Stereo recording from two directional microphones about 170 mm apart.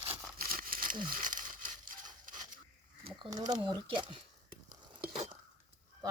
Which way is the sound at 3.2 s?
25° right (ahead or behind).